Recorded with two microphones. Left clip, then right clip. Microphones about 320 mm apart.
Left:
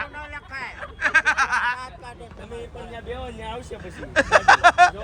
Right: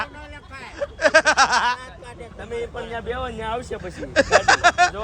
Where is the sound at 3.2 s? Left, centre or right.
Right.